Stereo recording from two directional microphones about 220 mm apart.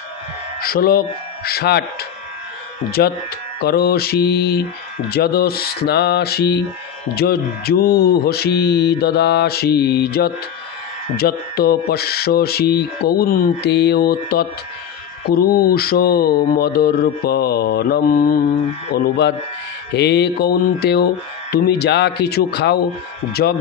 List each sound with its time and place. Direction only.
0.6 s speech: 45° left (ahead or behind)